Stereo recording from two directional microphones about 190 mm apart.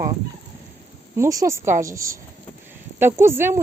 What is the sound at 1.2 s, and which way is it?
Speech, 15° right (ahead or behind).